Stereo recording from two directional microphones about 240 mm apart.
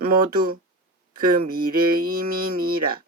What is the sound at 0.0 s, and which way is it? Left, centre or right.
Mantra, right.